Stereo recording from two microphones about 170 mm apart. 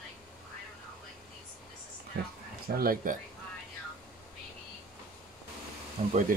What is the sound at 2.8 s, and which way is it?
Speech, 60° right (ahead or behind).